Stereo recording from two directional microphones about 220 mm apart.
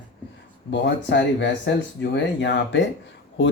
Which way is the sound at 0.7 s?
55° left (ahead or behind).